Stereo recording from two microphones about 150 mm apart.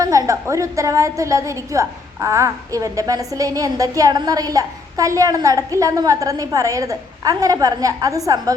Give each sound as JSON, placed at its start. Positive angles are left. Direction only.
{"t": 0.0, "sound": "a woman's voice", "side_deg": -20}